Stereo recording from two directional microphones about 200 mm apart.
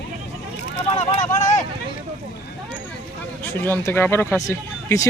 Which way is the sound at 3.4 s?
10° left (ahead or behind).